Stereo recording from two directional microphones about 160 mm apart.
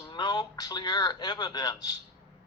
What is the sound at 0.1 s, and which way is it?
A man's voice, 25° left (ahead or behind).